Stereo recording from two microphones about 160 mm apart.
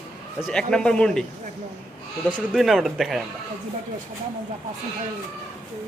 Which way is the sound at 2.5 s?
Centre (ahead or behind).